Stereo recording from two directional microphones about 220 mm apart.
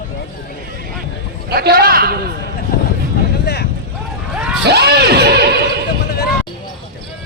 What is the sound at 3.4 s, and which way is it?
Vehicle, 50° left (ahead or behind).